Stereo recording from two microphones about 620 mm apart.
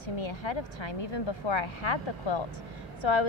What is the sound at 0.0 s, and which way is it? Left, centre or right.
A woman's voice, left.